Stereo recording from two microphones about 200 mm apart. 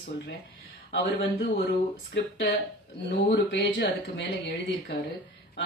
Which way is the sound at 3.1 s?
55° left (ahead or behind).